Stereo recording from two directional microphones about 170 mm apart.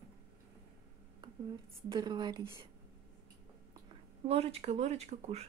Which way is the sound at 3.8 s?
35° right (ahead or behind).